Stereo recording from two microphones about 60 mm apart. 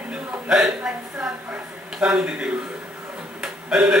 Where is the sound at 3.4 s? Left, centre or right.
Centre.